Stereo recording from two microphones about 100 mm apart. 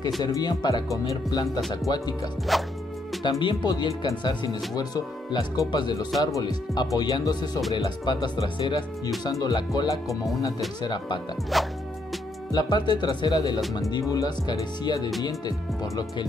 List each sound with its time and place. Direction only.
0.2 s speech: 40° left (ahead or behind)
2.5 s speech: centre (ahead or behind)
3.3 s speech: 45° left (ahead or behind)
10.0 s speech: centre (ahead or behind)
10.8 s speech: 50° left (ahead or behind)
11.5 s speech: centre (ahead or behind)
12.5 s speech: 45° left (ahead or behind)